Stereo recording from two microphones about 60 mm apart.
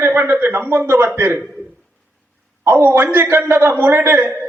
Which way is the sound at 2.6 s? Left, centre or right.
Right.